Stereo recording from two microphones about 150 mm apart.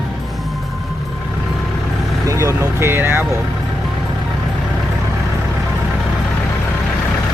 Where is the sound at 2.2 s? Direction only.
20° right (ahead or behind).